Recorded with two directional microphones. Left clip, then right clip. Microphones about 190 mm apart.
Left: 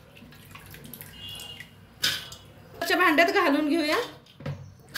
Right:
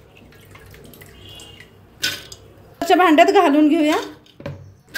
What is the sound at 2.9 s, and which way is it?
A woman's voice, 45° right (ahead or behind).